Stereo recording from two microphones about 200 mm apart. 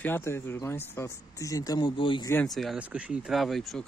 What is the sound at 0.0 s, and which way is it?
Speech, 10° left (ahead or behind).